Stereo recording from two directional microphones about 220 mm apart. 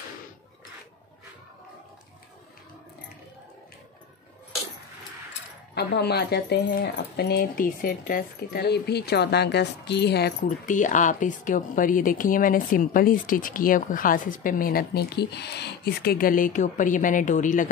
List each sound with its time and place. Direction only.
5.8 s speech: 50° left (ahead or behind)